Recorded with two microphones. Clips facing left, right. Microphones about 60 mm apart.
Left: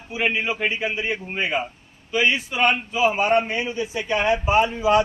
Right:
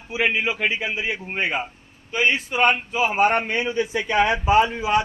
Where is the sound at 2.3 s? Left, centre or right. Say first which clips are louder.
Right 1 dB; right.